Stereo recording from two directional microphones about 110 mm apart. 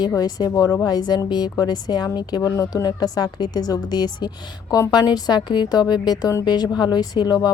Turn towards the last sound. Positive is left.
turn(degrees=40)  # may be behind; listen again after turning